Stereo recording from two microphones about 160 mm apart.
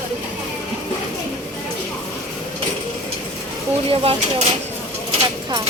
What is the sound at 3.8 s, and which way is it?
Speech, 35° right (ahead or behind).